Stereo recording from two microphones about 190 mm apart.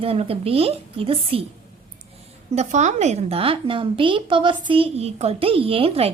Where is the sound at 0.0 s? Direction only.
30° right (ahead or behind).